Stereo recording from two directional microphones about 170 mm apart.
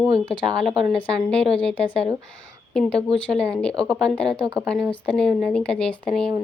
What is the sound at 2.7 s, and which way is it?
Speech, 5° left (ahead or behind).